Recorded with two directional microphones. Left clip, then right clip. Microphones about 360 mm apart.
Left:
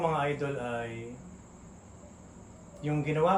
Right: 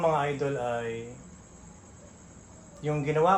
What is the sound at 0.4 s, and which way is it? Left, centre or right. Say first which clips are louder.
Speech: right 4 dB; centre.